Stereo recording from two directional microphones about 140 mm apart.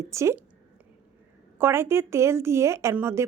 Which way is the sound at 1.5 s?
15° right (ahead or behind).